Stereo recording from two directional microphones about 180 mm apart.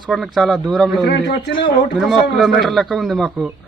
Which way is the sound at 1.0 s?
75° left (ahead or behind).